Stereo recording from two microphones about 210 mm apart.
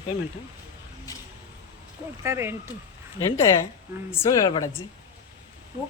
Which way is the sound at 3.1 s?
15° left (ahead or behind).